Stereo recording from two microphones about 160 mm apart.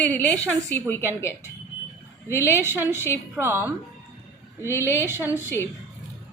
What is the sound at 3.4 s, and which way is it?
Speech, 15° right (ahead or behind).